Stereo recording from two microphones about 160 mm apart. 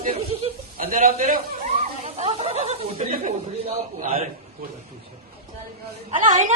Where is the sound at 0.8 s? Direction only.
55° right (ahead or behind).